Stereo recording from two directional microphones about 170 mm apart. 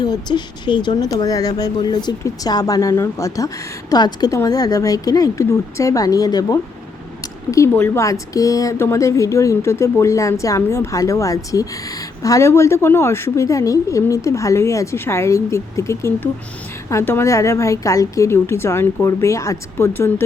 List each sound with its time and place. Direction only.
0.0 s a woman's voice: 25° left (ahead or behind)